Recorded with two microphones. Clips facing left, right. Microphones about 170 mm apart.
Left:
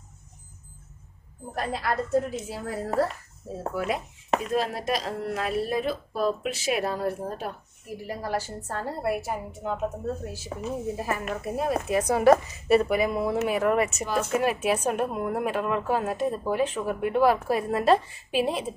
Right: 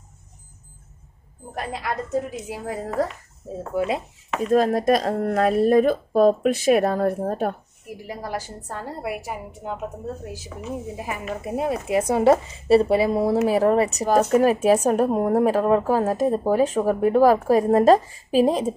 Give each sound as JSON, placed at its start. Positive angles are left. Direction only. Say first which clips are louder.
{"t": 1.5, "sound": "a woman's voice", "louder": "even", "side_deg": -15}
{"t": 4.4, "sound": "speech", "louder": "right 8 dB", "side_deg": -45}
{"t": 9.0, "sound": "a woman's voice", "louder": "left 3 dB", "side_deg": -10}
{"t": 10.5, "sound": "a woman's voice", "louder": "left 2 dB", "side_deg": 40}
{"t": 11.0, "sound": "a woman's voice", "louder": "even", "side_deg": -15}